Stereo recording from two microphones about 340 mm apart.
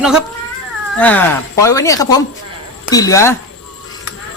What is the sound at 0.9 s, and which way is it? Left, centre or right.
Speech, centre.